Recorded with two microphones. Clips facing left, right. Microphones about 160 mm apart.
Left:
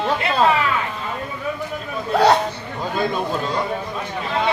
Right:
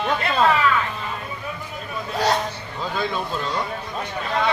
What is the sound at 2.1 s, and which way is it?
Hiccup, 65° left (ahead or behind).